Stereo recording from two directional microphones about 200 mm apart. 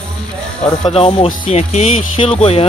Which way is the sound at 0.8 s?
30° left (ahead or behind).